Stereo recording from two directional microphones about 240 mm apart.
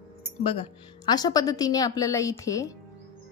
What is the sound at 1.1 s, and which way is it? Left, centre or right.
A woman's voice, centre.